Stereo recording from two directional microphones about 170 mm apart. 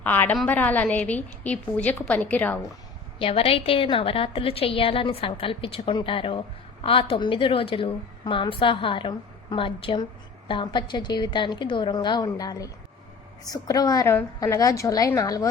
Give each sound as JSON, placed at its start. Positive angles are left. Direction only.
{"t": 0.0, "sound": "a woman's voice", "side_deg": 10}
{"t": 3.2, "sound": "a woman's voice", "side_deg": 35}